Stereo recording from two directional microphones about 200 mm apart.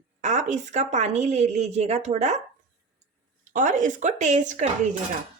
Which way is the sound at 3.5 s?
40° right (ahead or behind).